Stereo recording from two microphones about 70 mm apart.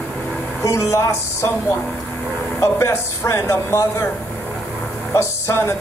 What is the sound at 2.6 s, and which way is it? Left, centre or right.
Speech, left.